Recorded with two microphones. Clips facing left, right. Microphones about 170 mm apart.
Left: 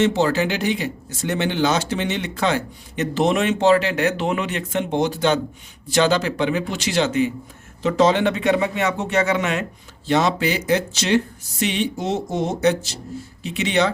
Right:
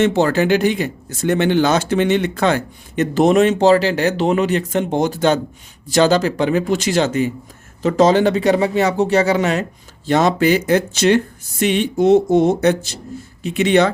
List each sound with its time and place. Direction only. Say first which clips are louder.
0.0 s speech: right 3 dB; 55° right (ahead or behind); by 9.6 s 35° right (ahead or behind)
10.1 s speech: right 5 dB; 50° right (ahead or behind)